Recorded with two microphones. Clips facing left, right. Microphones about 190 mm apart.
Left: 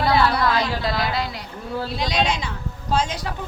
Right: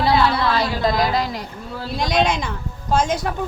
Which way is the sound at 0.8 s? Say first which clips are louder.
Right 5 dB; 45° right (ahead or behind).